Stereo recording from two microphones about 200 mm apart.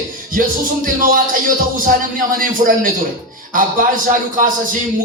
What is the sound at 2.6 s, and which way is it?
Music, 40° right (ahead or behind).